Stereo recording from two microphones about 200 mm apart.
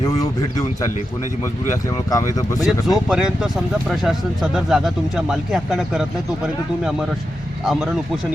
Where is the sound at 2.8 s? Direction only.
5° right (ahead or behind).